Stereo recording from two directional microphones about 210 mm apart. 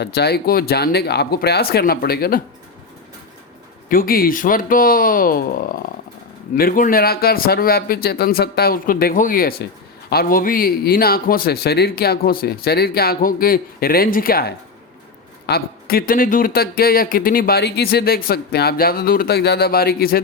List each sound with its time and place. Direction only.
0.0 s speech: 50° left (ahead or behind)
3.8 s speech: 45° left (ahead or behind)